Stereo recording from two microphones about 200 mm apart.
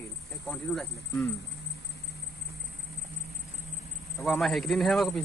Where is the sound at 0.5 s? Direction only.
Centre (ahead or behind).